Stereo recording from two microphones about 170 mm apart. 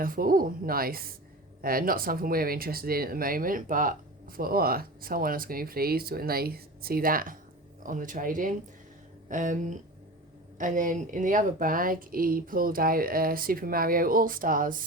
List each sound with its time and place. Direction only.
0.0 s speech: 55° right (ahead or behind)